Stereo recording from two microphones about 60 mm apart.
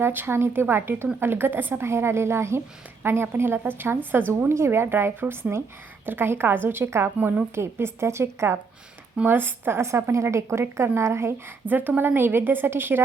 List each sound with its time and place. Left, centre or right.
0.0 s speech: right
7.5 s speech: right
9.2 s speech: right
11.6 s speech: right